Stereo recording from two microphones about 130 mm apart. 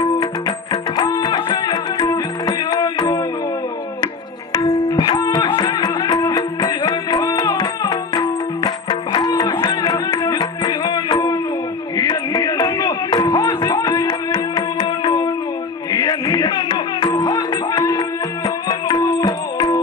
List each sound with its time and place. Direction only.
0.0 s music: 35° left (ahead or behind)
4.5 s music: 30° left (ahead or behind)